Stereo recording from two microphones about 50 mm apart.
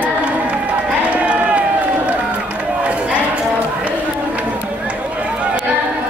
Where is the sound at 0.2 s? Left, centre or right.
Right.